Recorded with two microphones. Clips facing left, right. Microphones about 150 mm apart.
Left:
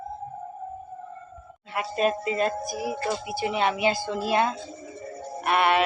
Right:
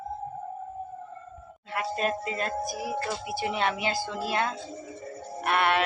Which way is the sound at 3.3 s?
5° left (ahead or behind).